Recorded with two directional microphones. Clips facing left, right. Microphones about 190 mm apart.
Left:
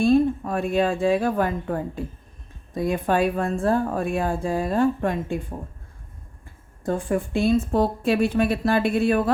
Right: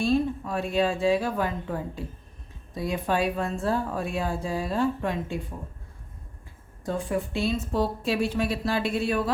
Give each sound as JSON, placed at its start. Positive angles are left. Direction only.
{"t": 0.0, "sound": "speech", "side_deg": 50}
{"t": 6.8, "sound": "speech", "side_deg": 50}